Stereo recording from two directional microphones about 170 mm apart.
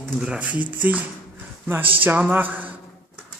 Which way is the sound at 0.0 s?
Centre (ahead or behind).